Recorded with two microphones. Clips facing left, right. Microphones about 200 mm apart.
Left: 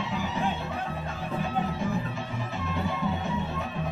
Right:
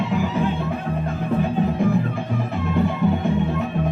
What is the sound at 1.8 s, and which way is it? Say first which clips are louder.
Music: right 9 dB; 60° right (ahead or behind).